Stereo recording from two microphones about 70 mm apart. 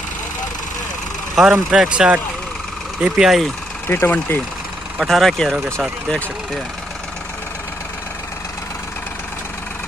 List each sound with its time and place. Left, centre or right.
1.5 s speech: centre
3.8 s speech: left
5.0 s speech: centre